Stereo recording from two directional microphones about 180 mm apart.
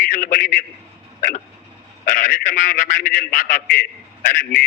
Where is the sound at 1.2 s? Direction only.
50° left (ahead or behind).